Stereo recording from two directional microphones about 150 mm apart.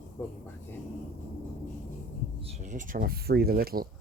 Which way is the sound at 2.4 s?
50° right (ahead or behind).